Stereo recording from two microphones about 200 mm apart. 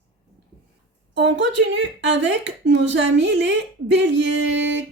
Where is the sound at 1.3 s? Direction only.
65° right (ahead or behind).